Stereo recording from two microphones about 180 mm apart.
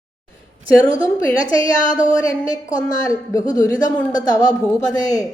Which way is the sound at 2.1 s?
20° left (ahead or behind).